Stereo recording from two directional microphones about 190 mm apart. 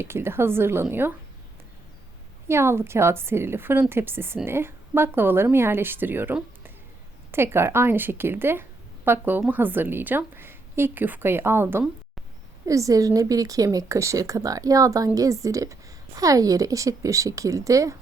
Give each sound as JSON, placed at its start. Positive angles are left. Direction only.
{"t": 0.0, "sound": "speech", "side_deg": -10}
{"t": 2.5, "sound": "speech", "side_deg": -15}